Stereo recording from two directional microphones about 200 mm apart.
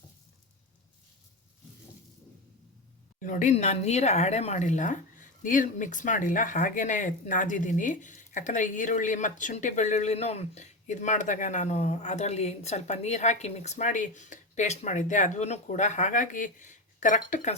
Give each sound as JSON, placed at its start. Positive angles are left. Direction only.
{"t": 3.2, "sound": "speech", "side_deg": 40}